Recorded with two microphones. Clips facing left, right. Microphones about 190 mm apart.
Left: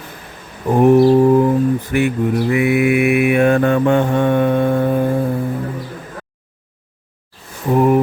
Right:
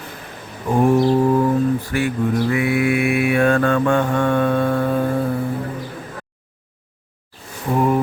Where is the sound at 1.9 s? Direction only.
20° left (ahead or behind).